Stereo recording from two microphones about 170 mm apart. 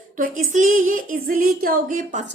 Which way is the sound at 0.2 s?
50° right (ahead or behind).